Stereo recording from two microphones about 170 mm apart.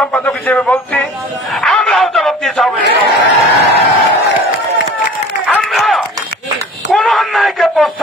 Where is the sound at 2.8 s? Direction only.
75° right (ahead or behind).